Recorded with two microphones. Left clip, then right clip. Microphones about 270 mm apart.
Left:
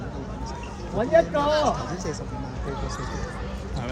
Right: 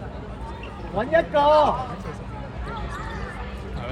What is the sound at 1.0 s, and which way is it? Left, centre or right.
Speech, centre.